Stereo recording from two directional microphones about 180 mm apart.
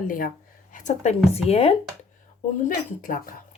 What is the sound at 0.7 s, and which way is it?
Speech, 45° left (ahead or behind).